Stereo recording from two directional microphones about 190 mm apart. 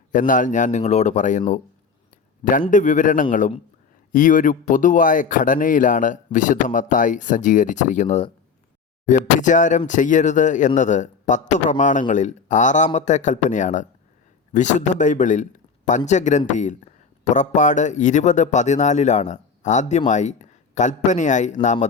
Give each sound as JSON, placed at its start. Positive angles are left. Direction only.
{"t": 0.1, "sound": "a man's voice", "side_deg": 45}